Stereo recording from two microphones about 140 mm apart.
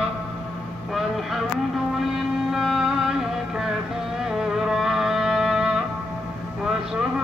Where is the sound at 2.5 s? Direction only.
Centre (ahead or behind).